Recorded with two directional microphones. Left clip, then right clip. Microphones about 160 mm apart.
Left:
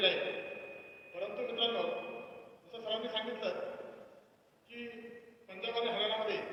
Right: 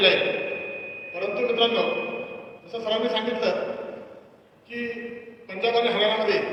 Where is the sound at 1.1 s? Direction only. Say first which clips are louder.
Right 13 dB; 45° right (ahead or behind).